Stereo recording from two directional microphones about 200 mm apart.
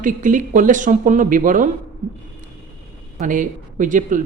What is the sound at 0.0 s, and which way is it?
A man's voice, 40° right (ahead or behind).